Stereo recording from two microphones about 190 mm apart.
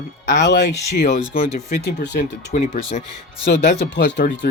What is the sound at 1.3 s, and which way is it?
Speech, 55° left (ahead or behind).